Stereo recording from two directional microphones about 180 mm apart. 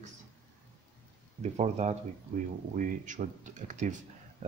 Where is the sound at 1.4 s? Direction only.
40° right (ahead or behind).